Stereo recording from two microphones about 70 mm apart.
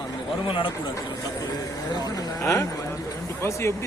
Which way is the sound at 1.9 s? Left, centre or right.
Left.